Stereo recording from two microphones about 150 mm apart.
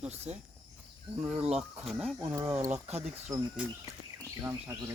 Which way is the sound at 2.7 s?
45° right (ahead or behind).